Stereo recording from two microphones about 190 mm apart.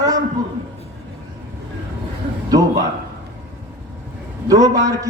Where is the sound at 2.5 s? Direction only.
20° right (ahead or behind).